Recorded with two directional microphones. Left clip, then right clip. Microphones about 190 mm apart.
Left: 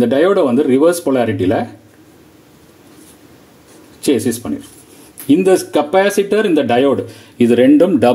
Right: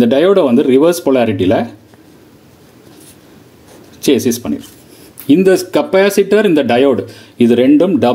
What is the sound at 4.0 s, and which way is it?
Speech, 20° right (ahead or behind).